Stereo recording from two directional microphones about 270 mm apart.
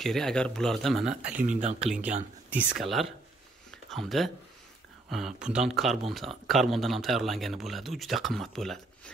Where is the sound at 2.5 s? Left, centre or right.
Centre.